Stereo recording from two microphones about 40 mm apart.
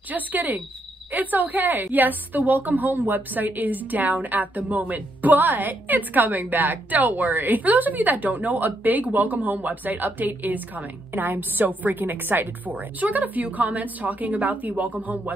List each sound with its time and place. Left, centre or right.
0.1 s a woman's voice: right